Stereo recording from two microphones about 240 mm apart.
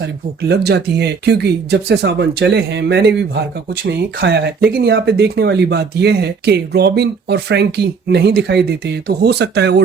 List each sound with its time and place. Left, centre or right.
0.0 s speech: right